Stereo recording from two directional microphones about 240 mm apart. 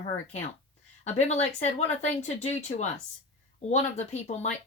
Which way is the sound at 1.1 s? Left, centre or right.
Left.